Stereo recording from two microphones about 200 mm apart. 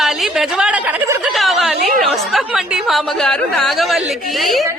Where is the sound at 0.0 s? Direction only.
Centre (ahead or behind).